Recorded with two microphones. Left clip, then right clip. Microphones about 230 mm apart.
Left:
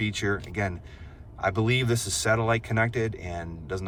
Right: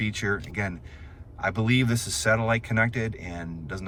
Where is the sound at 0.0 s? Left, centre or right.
Centre.